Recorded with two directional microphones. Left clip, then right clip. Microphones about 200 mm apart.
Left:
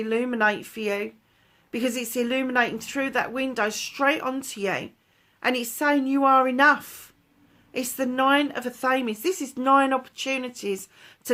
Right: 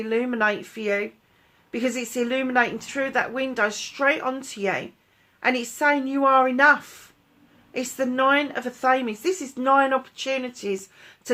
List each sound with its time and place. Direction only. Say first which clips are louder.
0.0 s a woman's voice: even; 50° left (ahead or behind)